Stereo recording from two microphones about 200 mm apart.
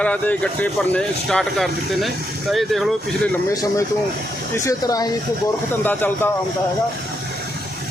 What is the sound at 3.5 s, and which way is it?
Speech, 15° left (ahead or behind).